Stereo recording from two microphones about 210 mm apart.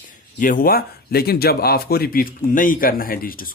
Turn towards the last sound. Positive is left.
turn(degrees=45)  # may be behind; listen again after turning